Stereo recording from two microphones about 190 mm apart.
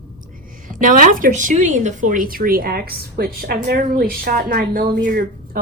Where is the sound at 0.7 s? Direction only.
45° right (ahead or behind).